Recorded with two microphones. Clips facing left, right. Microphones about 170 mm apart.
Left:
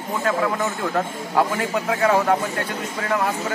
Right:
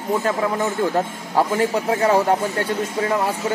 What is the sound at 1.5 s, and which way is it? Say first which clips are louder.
Speech: right 3 dB; 30° right (ahead or behind).